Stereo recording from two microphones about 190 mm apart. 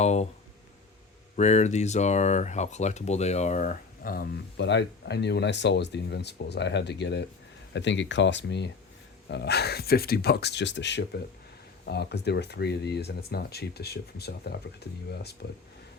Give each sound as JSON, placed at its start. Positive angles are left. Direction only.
{"t": 0.0, "sound": "speech", "side_deg": 35}
{"t": 1.4, "sound": "speech", "side_deg": 35}
{"t": 4.6, "sound": "speech", "side_deg": 65}